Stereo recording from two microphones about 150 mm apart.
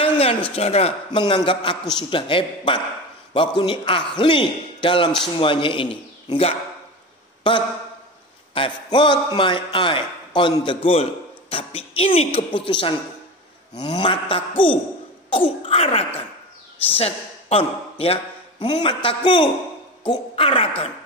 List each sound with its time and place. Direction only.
0.0 s a sound: 40° left (ahead or behind)
0.6 s a man's voice: 45° left (ahead or behind)
13.9 s a man's voice: 35° left (ahead or behind)